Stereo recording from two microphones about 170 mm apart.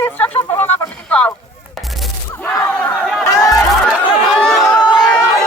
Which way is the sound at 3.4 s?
20° left (ahead or behind).